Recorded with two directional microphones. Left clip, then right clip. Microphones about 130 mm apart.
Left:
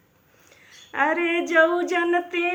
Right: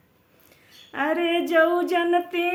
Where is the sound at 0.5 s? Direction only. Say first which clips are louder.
Left 4 dB; 40° right (ahead or behind).